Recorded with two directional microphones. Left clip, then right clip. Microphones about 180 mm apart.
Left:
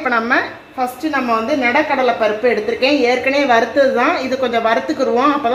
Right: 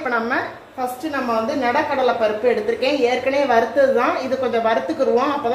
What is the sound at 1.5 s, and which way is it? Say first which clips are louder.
A woman's voice: left 4 dB; 50° left (ahead or behind).